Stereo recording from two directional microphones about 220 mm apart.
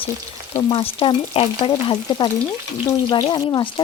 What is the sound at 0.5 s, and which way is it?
Speech, 25° left (ahead or behind).